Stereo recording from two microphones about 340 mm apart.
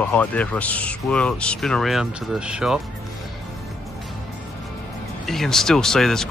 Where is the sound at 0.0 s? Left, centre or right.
Centre.